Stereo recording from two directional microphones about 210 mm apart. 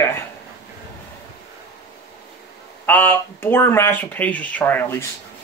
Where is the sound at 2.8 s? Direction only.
10° left (ahead or behind).